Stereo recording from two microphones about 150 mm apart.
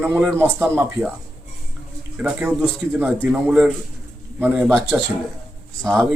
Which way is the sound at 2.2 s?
10° right (ahead or behind).